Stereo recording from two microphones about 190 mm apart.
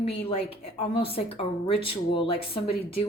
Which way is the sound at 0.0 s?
30° left (ahead or behind).